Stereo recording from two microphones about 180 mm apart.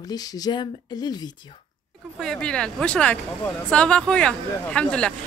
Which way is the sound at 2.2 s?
5° left (ahead or behind).